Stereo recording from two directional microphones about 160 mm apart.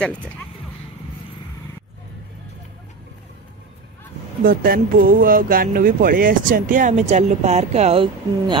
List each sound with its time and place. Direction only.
0.0 s speech: 5° left (ahead or behind)
4.5 s speech: 65° right (ahead or behind); by 8.5 s 35° right (ahead or behind)